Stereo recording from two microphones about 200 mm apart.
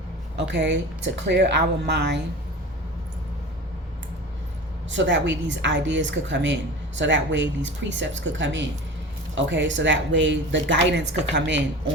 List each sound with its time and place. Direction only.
0.3 s a woman's voice: 60° right (ahead or behind)
4.9 s a woman's voice: 65° right (ahead or behind)